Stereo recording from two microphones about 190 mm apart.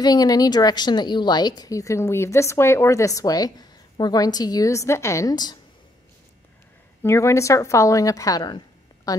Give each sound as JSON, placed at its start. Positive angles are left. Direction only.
{"t": 0.0, "sound": "a woman's voice", "side_deg": 20}
{"t": 7.0, "sound": "a woman's voice", "side_deg": 15}